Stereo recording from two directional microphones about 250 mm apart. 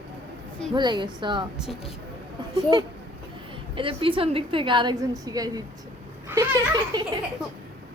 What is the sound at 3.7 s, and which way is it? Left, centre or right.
A woman's voice, right.